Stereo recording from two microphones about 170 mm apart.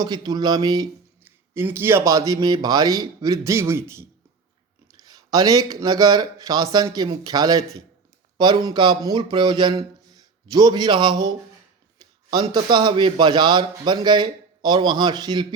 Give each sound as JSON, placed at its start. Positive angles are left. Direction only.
{"t": 0.0, "sound": "speech", "side_deg": -25}
{"t": 1.5, "sound": "speech", "side_deg": -15}